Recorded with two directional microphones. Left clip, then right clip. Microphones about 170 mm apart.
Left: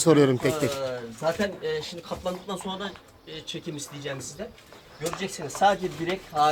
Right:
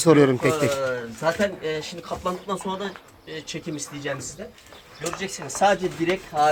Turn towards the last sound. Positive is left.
turn(degrees=-5)  # may be behind; listen again after turning